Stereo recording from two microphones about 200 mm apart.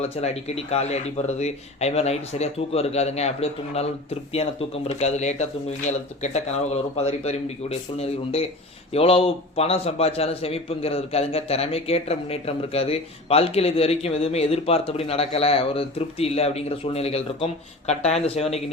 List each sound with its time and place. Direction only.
0.0 s a man's voice: 35° left (ahead or behind)
4.9 s a man's voice: 35° left (ahead or behind)